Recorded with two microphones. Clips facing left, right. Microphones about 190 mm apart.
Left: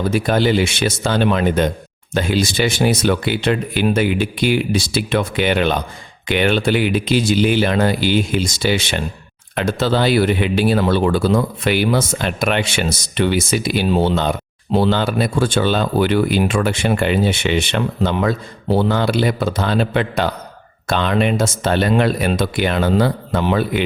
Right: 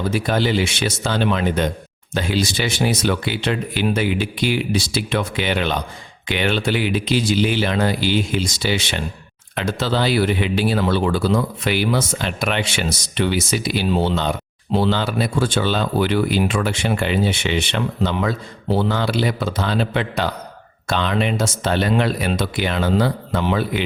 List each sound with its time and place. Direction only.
0.1 s a man's voice: 50° left (ahead or behind)